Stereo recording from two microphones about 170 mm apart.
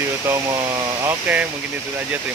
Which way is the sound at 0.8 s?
15° right (ahead or behind).